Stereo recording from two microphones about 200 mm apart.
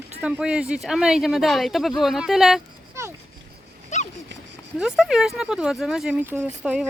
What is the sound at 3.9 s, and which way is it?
Dog, 35° left (ahead or behind).